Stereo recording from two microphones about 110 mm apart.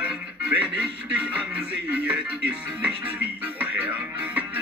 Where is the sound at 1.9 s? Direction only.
10° right (ahead or behind).